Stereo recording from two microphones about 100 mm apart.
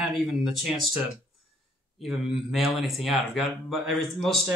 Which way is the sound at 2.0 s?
5° right (ahead or behind).